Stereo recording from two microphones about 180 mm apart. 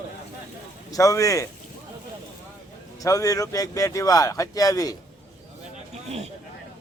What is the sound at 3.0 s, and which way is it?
Speech, 20° left (ahead or behind).